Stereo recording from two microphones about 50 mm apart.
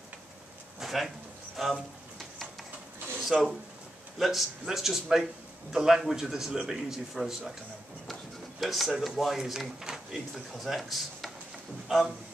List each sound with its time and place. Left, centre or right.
0.7 s a sound: centre
3.3 s a man's voice: centre
4.2 s a man's voice: centre